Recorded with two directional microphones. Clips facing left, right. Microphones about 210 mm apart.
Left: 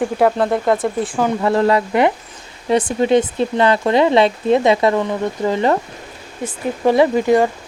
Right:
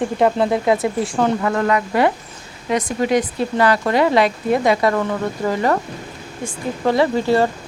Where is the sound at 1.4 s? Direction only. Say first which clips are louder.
Left 3 dB; 30° left (ahead or behind).